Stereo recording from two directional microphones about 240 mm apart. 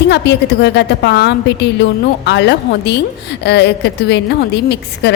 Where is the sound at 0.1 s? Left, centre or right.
Left.